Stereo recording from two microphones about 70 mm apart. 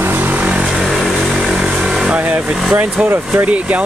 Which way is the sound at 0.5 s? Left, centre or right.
Centre.